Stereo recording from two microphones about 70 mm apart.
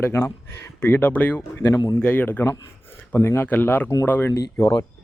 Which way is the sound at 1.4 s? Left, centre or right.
Left.